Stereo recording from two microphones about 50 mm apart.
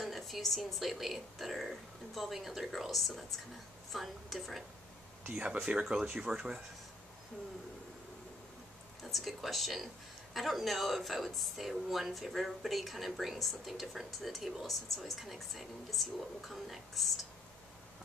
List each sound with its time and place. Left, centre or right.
0.0 s speech: centre
5.7 s speech: centre
9.0 s speech: centre